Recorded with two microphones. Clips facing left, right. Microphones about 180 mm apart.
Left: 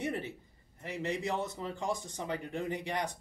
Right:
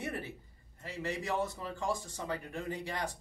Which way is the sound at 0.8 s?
20° left (ahead or behind).